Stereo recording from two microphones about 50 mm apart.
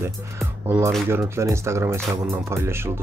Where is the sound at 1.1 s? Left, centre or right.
Right.